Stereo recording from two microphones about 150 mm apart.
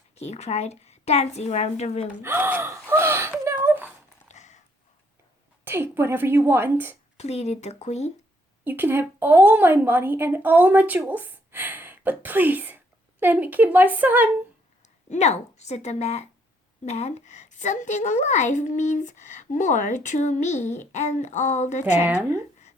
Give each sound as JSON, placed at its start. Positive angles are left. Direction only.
{"t": 0.2, "sound": "a woman's voice", "side_deg": 45}
{"t": 2.2, "sound": "a woman's voice", "side_deg": -15}
{"t": 2.9, "sound": "a sound", "side_deg": -15}
{"t": 4.3, "sound": "a sound", "side_deg": 50}
{"t": 5.6, "sound": "a woman's voice", "side_deg": -15}
{"t": 7.2, "sound": "a woman's voice", "side_deg": 45}
{"t": 8.6, "sound": "a woman's voice", "side_deg": -15}
{"t": 15.1, "sound": "a woman's voice", "side_deg": 50}
{"t": 21.9, "sound": "a woman's voice", "side_deg": -15}